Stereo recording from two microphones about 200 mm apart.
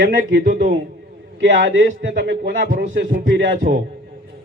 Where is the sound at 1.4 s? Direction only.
65° right (ahead or behind).